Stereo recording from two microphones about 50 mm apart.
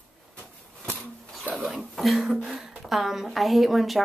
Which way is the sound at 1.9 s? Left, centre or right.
Centre.